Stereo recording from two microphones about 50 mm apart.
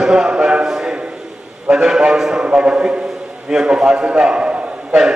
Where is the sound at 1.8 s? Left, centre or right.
Centre.